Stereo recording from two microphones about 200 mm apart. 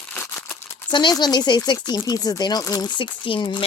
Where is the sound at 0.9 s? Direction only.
20° left (ahead or behind).